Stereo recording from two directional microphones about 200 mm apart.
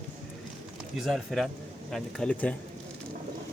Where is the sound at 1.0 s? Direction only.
Centre (ahead or behind).